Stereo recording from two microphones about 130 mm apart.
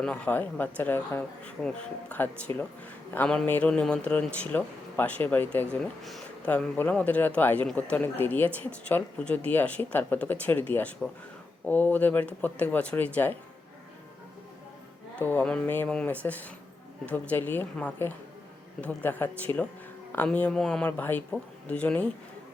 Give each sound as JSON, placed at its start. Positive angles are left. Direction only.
{"t": 0.0, "sound": "a man's voice", "side_deg": 10}
{"t": 5.8, "sound": "speech", "side_deg": 0}
{"t": 6.5, "sound": "a man's voice", "side_deg": 10}
{"t": 15.2, "sound": "a man's voice", "side_deg": 15}